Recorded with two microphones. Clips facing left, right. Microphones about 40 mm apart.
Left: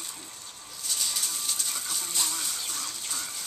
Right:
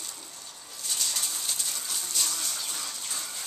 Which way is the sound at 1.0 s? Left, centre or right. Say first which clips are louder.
Even; centre.